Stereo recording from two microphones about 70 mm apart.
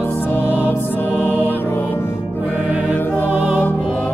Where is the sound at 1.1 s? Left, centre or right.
Left.